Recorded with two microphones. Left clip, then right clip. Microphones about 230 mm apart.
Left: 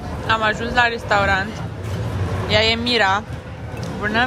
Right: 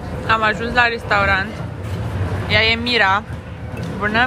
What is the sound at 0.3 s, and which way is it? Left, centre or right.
Speech, centre.